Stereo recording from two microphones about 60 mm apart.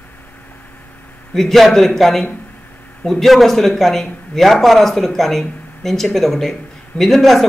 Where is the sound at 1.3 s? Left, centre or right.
Centre.